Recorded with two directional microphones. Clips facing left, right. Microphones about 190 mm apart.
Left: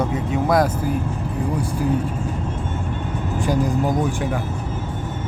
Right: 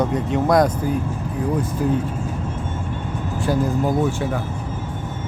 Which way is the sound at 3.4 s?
15° left (ahead or behind).